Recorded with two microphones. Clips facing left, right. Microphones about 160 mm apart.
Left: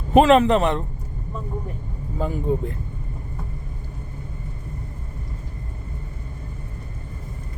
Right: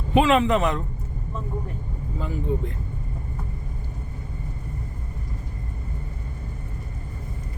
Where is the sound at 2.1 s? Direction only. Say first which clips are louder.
Left 4 dB; 45° left (ahead or behind).